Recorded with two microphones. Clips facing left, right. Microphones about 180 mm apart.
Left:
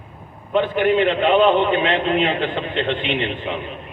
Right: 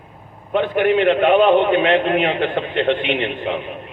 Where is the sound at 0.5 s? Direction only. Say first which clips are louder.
Right 1 dB; 55° right (ahead or behind).